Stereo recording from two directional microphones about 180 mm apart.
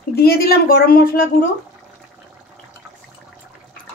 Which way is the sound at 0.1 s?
60° left (ahead or behind).